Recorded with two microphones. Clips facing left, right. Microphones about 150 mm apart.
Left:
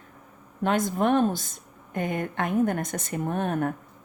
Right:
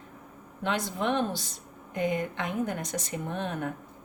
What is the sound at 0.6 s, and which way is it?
Speech, 45° left (ahead or behind).